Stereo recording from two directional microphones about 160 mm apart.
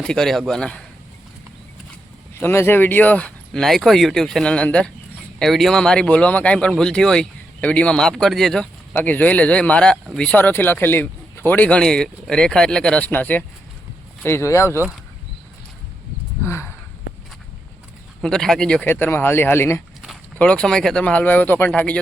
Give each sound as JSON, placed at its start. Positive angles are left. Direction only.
{"t": 0.0, "sound": "a man's voice", "side_deg": 5}
{"t": 2.4, "sound": "speech", "side_deg": 15}
{"t": 16.5, "sound": "a sound", "side_deg": 15}
{"t": 18.2, "sound": "speech", "side_deg": 5}
{"t": 20.0, "sound": "speech", "side_deg": 5}